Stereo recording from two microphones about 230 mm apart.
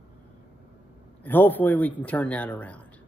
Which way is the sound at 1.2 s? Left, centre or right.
Centre.